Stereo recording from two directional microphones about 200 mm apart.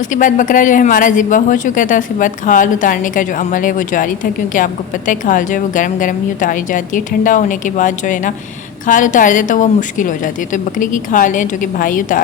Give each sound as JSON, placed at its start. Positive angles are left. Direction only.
{"t": 0.1, "sound": "speech", "side_deg": 40}